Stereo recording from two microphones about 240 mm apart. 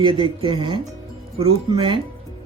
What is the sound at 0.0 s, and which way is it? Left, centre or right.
Speech, right.